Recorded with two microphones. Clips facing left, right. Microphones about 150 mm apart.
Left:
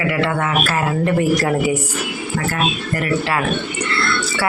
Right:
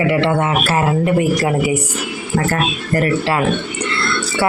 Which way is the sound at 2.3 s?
40° right (ahead or behind).